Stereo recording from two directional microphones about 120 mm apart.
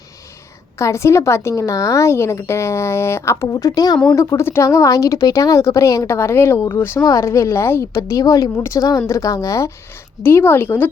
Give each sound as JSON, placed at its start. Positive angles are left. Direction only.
{"t": 0.8, "sound": "a woman's voice", "side_deg": 25}